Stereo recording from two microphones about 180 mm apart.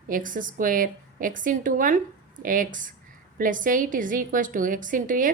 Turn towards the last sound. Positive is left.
turn(degrees=-50)  # may be behind; listen again after turning